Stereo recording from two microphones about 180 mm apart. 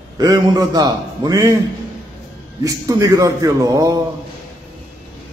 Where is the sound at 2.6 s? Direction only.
20° right (ahead or behind).